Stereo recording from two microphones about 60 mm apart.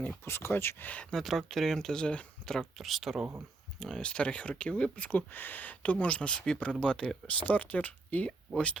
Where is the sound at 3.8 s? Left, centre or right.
Centre.